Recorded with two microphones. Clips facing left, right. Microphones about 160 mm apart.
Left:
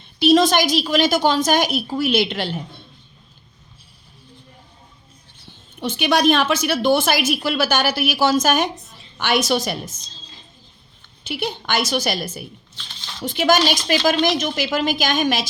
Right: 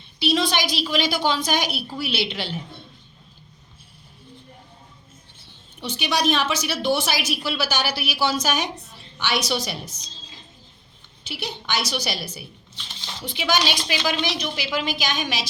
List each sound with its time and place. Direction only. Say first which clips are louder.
0.2 s a woman's voice: left 8 dB; 45° left (ahead or behind)
5.8 s a woman's voice: left 6 dB; 55° left (ahead or behind)
11.2 s a woman's voice: left 7 dB; 55° left (ahead or behind)